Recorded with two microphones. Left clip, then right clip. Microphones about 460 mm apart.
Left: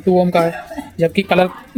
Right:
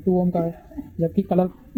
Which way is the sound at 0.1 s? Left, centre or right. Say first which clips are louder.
Left 9 dB; left.